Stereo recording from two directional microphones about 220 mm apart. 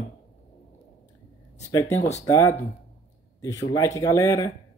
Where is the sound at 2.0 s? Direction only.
30° left (ahead or behind).